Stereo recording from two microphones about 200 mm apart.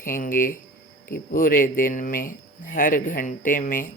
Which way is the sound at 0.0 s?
45° left (ahead or behind).